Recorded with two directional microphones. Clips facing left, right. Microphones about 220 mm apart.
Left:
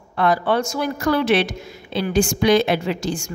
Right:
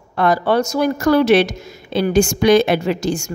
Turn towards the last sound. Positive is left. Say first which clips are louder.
# right 4 dB
turn(degrees=-45)  # may be behind; listen again after turning